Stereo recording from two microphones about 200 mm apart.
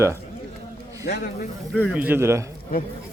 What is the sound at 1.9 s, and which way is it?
Speech, 10° right (ahead or behind).